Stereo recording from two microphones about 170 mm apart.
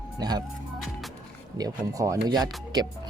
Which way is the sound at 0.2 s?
25° right (ahead or behind).